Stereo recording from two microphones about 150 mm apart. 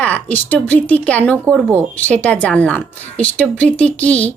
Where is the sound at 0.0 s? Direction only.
10° left (ahead or behind).